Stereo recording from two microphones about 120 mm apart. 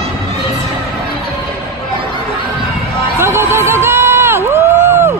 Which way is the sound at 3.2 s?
20° right (ahead or behind).